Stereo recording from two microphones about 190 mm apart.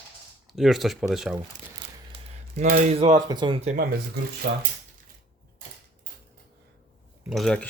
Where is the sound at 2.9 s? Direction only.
35° right (ahead or behind).